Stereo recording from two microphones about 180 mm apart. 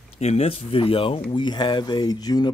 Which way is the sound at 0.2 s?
35° left (ahead or behind).